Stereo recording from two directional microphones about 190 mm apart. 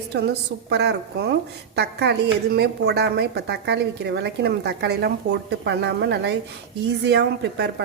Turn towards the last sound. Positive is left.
turn(degrees=-65)  # may be behind; listen again after turning